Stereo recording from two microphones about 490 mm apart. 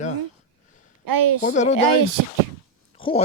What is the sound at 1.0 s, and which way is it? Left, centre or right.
Speech, right.